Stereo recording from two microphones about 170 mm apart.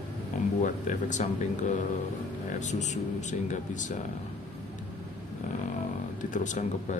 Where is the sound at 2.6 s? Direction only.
45° left (ahead or behind).